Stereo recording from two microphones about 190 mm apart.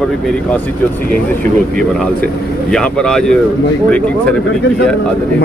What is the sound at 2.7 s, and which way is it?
Speech, 5° left (ahead or behind).